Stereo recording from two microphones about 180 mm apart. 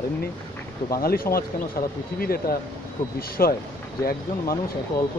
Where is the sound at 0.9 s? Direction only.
55° left (ahead or behind).